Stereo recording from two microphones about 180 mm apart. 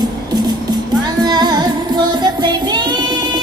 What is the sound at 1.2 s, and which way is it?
Music, 20° right (ahead or behind).